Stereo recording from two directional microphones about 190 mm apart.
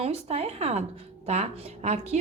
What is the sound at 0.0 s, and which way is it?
A woman's voice, 35° right (ahead or behind).